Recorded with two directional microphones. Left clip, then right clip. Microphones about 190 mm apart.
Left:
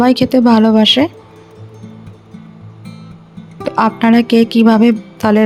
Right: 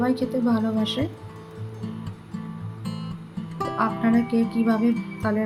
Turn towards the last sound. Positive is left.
turn(degrees=50)  # may be behind; listen again after turning